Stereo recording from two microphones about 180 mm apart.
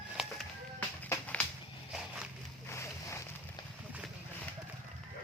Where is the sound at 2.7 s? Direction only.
15° left (ahead or behind).